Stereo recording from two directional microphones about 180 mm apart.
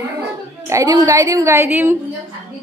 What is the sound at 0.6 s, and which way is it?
A woman's voice, 15° right (ahead or behind).